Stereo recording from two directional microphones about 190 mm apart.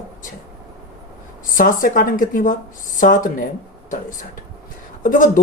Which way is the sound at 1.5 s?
45° left (ahead or behind).